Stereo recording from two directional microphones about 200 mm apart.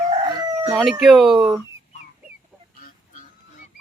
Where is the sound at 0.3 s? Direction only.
20° right (ahead or behind).